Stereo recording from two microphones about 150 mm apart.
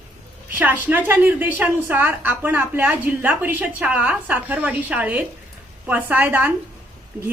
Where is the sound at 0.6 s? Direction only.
10° right (ahead or behind).